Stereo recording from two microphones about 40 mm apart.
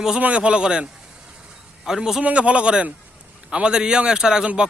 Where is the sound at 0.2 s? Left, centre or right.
Right; by 2.2 s centre.